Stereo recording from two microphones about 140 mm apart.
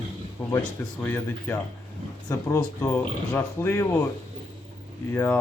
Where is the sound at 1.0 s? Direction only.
10° left (ahead or behind).